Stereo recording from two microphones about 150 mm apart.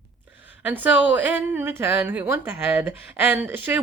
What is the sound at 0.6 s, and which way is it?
Speech, 10° right (ahead or behind).